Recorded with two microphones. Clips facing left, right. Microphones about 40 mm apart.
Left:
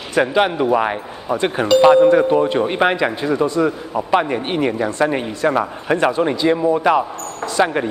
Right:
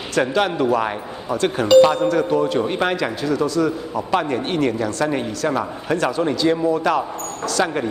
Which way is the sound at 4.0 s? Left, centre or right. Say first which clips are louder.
Left 4 dB; centre.